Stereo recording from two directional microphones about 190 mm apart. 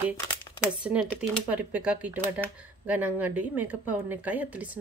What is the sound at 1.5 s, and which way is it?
A woman's voice, 5° right (ahead or behind).